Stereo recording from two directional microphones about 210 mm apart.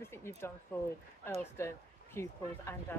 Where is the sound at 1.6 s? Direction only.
10° left (ahead or behind).